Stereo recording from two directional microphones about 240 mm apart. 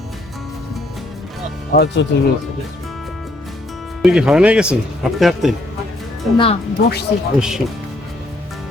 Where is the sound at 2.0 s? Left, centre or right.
Left.